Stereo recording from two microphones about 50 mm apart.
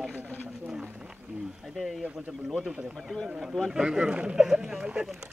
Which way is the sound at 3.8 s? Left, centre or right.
Centre.